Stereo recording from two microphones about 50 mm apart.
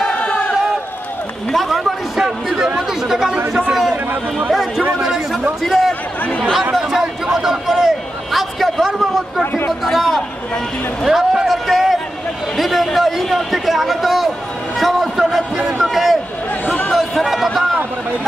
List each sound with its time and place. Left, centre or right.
0.0 s a sound: left
1.5 s a man's voice: centre
3.9 s speech: right
4.5 s a man's voice: centre
9.4 s speech: left
9.7 s a man's voice: centre
16.9 s a sound: centre